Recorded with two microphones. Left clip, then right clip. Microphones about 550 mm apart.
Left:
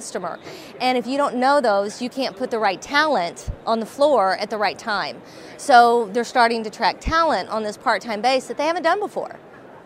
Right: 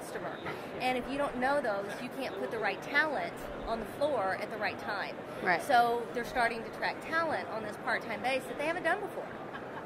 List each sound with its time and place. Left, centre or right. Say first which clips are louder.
0.7 s a woman's voice: left 13 dB; left